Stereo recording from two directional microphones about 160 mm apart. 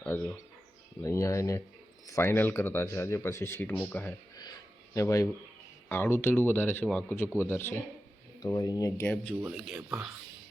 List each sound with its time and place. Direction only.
1.0 s speech: 20° left (ahead or behind)
9.5 s speech: 5° right (ahead or behind)